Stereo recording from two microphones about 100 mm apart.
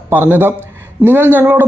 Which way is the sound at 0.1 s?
20° right (ahead or behind).